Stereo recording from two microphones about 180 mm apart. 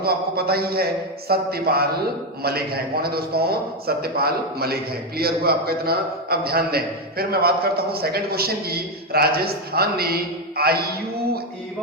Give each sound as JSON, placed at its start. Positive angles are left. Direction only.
{"t": 0.0, "sound": "a man's voice", "side_deg": -60}